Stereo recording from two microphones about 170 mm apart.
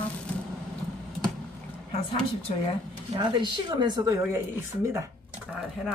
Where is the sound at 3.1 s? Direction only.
25° right (ahead or behind).